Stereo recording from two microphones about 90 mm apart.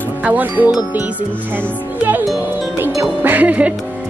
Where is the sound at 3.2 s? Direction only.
20° right (ahead or behind).